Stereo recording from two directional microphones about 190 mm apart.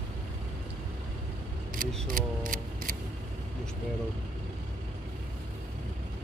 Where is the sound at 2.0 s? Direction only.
45° right (ahead or behind).